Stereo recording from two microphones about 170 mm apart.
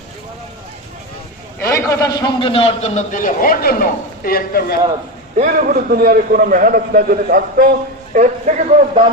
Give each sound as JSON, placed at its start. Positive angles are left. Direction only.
{"t": 1.6, "sound": "a man's voice", "side_deg": 15}
{"t": 5.4, "sound": "a man's voice", "side_deg": -55}